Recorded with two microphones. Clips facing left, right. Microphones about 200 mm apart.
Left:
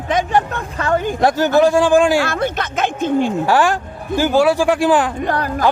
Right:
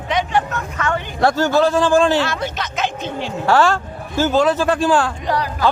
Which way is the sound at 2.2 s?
55° left (ahead or behind).